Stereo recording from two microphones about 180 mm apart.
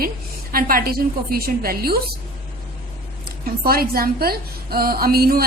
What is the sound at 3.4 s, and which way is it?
A woman's voice, 55° right (ahead or behind).